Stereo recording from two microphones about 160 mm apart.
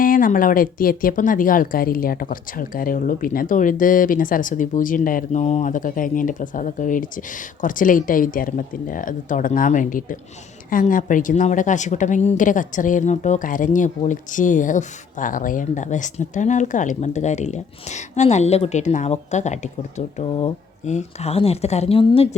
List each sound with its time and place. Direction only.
0.0 s a woman's voice: 60° left (ahead or behind)
20.1 s a woman's voice: 30° left (ahead or behind)
20.8 s a woman's voice: 45° left (ahead or behind)